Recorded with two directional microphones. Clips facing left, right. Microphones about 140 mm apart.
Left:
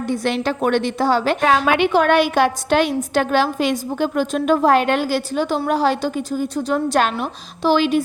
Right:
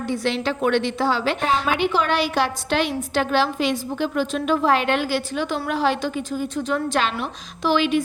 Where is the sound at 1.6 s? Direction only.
70° left (ahead or behind).